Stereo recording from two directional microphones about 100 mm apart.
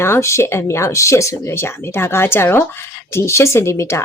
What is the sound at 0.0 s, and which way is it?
Speech, 25° left (ahead or behind).